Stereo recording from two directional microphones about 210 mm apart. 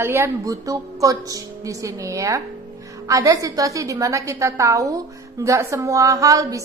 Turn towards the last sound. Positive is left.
turn(degrees=-15)  # may be behind; listen again after turning